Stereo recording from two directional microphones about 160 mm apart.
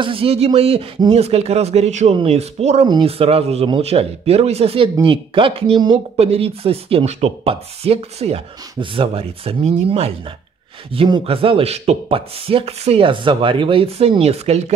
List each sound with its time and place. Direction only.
0.0 s speech: 35° right (ahead or behind)